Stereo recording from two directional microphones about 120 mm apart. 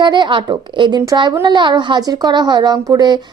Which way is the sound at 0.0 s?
40° right (ahead or behind).